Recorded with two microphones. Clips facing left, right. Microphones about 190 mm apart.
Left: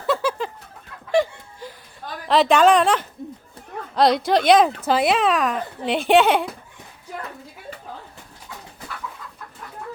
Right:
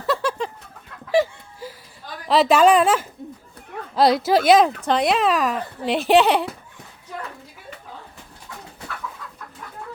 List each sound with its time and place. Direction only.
0.1 s chicken: centre (ahead or behind)
1.1 s laughter: 5° right (ahead or behind)
2.2 s speech: centre (ahead or behind)